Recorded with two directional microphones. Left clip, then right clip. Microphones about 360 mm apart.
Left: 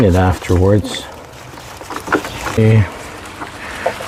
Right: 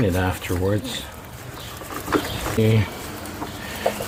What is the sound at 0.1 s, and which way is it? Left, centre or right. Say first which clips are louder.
Speech: left 9 dB; centre.